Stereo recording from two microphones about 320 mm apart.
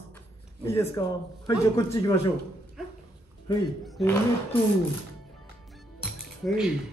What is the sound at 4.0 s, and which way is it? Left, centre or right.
Speech, centre.